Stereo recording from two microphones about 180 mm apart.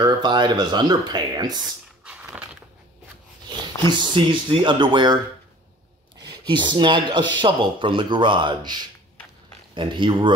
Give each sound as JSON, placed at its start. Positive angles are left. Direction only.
{"t": 0.0, "sound": "speech", "side_deg": -25}
{"t": 2.0, "sound": "a sound", "side_deg": -5}
{"t": 4.1, "sound": "speech", "side_deg": -30}
{"t": 6.2, "sound": "speech", "side_deg": -25}